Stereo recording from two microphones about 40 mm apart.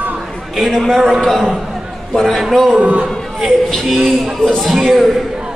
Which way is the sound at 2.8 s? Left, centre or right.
Right.